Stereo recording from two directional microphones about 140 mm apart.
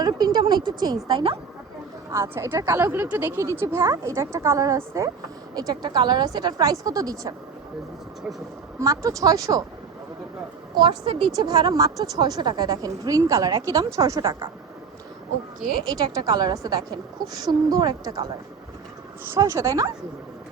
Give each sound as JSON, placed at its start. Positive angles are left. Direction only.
{"t": 0.0, "sound": "speech", "side_deg": -30}
{"t": 2.0, "sound": "a woman's voice", "side_deg": -20}
{"t": 8.8, "sound": "a woman's voice", "side_deg": -25}
{"t": 10.8, "sound": "a woman's voice", "side_deg": -35}
{"t": 16.0, "sound": "a woman's voice", "side_deg": -25}
{"t": 19.3, "sound": "a woman's voice", "side_deg": -20}